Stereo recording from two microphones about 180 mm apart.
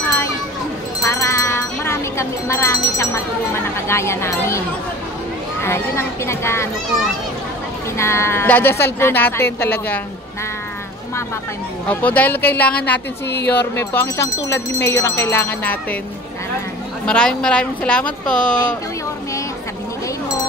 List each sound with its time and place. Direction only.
1.0 s speech: 15° left (ahead or behind)
8.0 s speech: 15° left (ahead or behind)
11.9 s speech: 10° left (ahead or behind)
13.3 s speech: 65° left (ahead or behind)
13.7 s speech: 15° left (ahead or behind)
17.0 s a woman's voice: 5° left (ahead or behind)